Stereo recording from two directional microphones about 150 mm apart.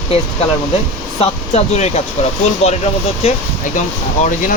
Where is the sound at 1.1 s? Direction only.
50° left (ahead or behind).